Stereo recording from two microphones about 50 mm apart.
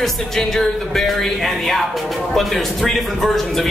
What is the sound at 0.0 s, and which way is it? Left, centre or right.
Speech, centre.